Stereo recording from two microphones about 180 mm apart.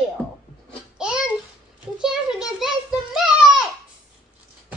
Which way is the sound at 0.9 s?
5° right (ahead or behind).